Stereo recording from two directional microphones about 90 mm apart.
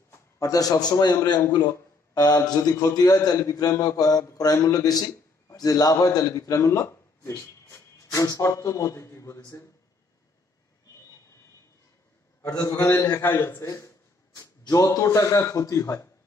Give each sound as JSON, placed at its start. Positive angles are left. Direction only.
{"t": 0.4, "sound": "a man's voice", "side_deg": 45}
{"t": 12.4, "sound": "a man's voice", "side_deg": 45}
{"t": 13.2, "sound": "a sound", "side_deg": 25}
{"t": 14.6, "sound": "a man's voice", "side_deg": 45}